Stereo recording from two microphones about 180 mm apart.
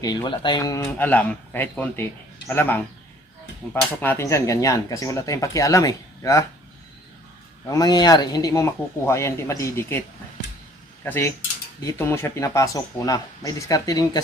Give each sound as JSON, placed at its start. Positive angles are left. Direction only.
{"t": 0.0, "sound": "speech", "side_deg": 25}
{"t": 7.7, "sound": "speech", "side_deg": 20}
{"t": 11.0, "sound": "mechanisms", "side_deg": 10}
{"t": 11.9, "sound": "speech", "side_deg": 15}